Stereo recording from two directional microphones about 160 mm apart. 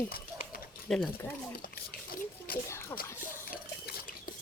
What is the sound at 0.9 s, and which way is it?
Speech, 10° left (ahead or behind).